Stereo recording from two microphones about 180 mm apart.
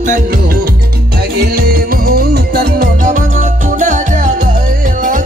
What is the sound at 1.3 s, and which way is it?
Music, 60° right (ahead or behind).